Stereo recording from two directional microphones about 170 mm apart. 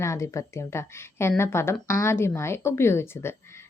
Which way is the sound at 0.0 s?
15° left (ahead or behind).